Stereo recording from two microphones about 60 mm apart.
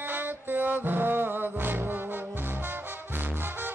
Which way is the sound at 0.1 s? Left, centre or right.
Right.